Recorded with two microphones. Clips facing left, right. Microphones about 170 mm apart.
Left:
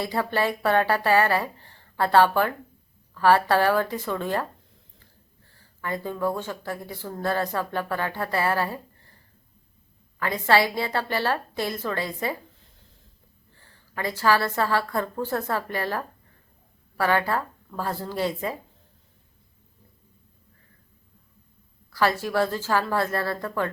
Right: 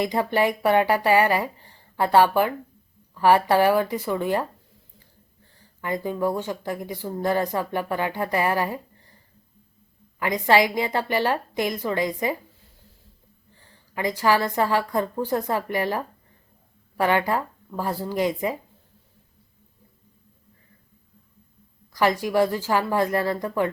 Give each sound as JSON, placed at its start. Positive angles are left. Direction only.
{"t": 0.0, "sound": "speech", "side_deg": -15}
{"t": 5.5, "sound": "speech", "side_deg": -15}
{"t": 10.2, "sound": "speech", "side_deg": -15}
{"t": 13.7, "sound": "speech", "side_deg": -15}
{"t": 21.9, "sound": "speech", "side_deg": -15}